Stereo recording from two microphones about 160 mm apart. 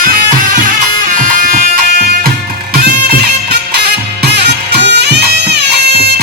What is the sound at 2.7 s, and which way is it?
Music, 80° right.